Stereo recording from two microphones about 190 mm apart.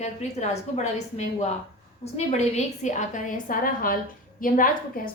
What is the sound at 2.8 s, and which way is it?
A woman's voice, 40° left (ahead or behind).